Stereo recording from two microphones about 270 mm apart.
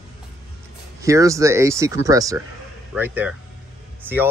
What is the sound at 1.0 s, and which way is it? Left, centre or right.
Speech, centre.